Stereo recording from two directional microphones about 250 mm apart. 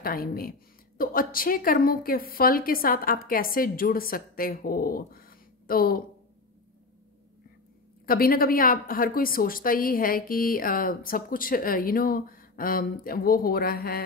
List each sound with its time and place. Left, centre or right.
0.0 s a woman's voice: left
8.1 s a woman's voice: left